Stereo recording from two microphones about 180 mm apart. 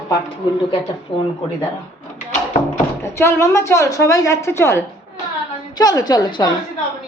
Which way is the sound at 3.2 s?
15° left (ahead or behind).